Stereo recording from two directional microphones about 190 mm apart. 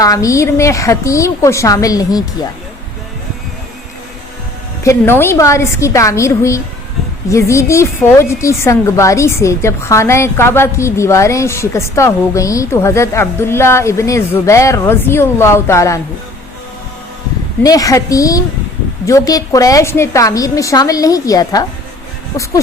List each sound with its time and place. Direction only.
0.0 s a woman's voice: 15° left (ahead or behind)
4.8 s a woman's voice: 15° left (ahead or behind)
17.6 s a woman's voice: 20° left (ahead or behind)